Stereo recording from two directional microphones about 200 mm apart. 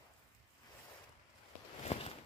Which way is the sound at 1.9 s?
35° left (ahead or behind).